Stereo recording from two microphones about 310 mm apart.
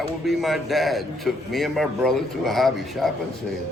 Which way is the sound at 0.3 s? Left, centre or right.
Centre.